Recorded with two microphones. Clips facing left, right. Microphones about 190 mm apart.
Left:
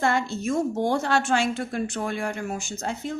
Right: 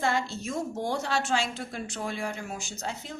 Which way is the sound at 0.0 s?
55° left (ahead or behind).